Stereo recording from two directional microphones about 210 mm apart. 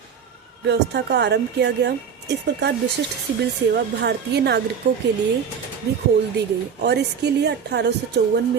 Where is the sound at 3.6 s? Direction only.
55° right (ahead or behind).